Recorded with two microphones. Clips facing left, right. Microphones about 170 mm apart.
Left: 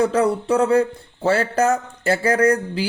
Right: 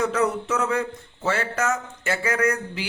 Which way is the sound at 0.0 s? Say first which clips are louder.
Left 5 dB; 30° left (ahead or behind).